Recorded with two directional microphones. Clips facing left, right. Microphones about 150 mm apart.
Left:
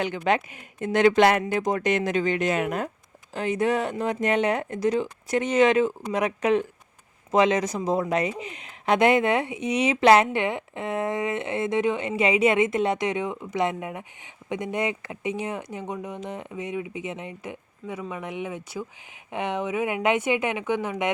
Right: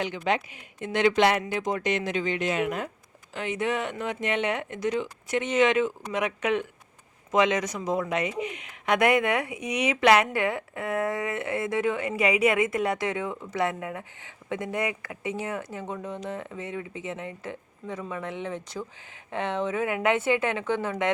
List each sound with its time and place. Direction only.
0.0 s speech: 50° left (ahead or behind); by 21.1 s 15° left (ahead or behind)